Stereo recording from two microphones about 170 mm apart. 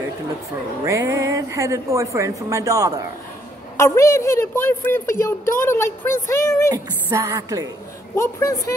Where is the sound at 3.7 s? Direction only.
15° left (ahead or behind).